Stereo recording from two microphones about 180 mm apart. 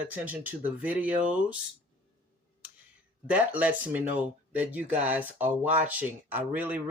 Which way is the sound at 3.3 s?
10° right (ahead or behind).